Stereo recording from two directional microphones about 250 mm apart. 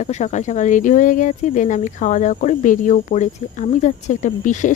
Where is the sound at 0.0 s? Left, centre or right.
Left.